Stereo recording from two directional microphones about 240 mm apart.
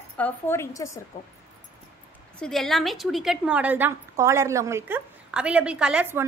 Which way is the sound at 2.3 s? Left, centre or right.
Centre.